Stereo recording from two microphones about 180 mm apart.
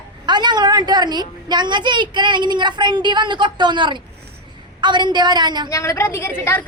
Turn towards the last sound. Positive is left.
turn(degrees=10)  # may be behind; listen again after turning